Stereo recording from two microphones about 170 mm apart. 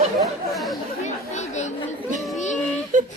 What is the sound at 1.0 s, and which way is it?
Chatter, 40° left (ahead or behind).